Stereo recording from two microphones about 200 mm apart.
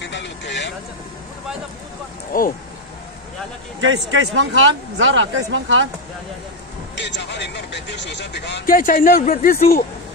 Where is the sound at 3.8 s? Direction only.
70° right (ahead or behind).